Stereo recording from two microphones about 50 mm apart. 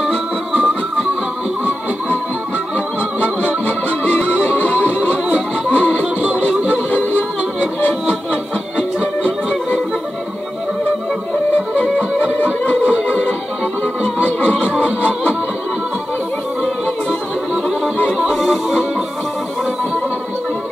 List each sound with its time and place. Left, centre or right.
3.6 s music: left
5.1 s music: right
8.1 s music: right
12.4 s music: left
14.6 s music: right
18.3 s music: centre